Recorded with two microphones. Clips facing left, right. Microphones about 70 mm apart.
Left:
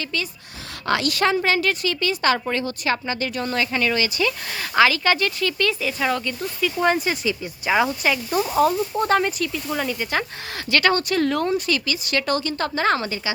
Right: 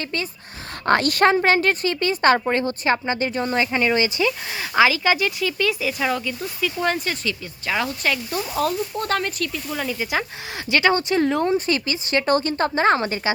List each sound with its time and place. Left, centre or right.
0.0 s a woman's voice: right
4.3 s speech: centre
10.7 s speech: centre
11.5 s a woman's voice: right